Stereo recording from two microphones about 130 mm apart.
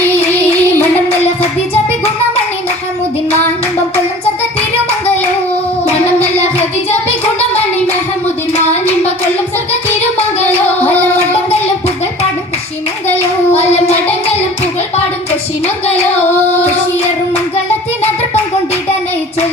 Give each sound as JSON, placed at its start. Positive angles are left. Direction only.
{"t": 0.3, "sound": "child singing", "side_deg": 15}
{"t": 6.1, "sound": "child singing", "side_deg": 55}
{"t": 10.8, "sound": "music", "side_deg": 15}
{"t": 13.8, "sound": "music", "side_deg": 55}
{"t": 14.9, "sound": "a sound", "side_deg": 55}